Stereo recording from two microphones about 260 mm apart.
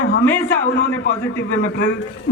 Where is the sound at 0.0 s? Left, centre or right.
Left.